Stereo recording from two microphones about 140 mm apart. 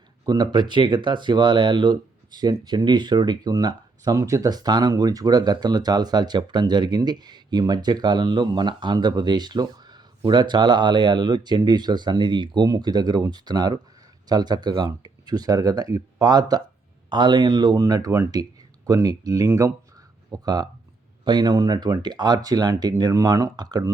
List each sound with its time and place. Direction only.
0.3 s speech: 30° right (ahead or behind)